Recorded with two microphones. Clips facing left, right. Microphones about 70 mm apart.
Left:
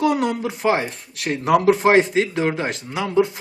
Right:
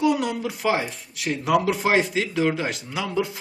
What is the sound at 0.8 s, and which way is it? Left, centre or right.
Speech, left.